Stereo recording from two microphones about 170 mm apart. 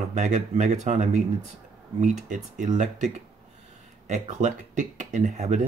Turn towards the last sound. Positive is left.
turn(degrees=-45)  # may be behind; listen again after turning